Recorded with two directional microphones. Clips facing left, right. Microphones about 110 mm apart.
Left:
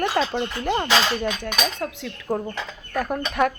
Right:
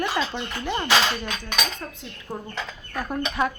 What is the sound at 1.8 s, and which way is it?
Cutlery, 90° left.